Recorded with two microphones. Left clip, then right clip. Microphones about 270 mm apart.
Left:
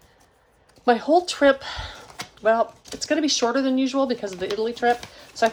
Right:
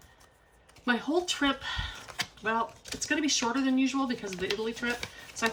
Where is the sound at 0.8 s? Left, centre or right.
Centre.